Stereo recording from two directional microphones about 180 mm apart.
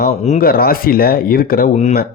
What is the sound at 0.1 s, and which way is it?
Speech, 40° left (ahead or behind).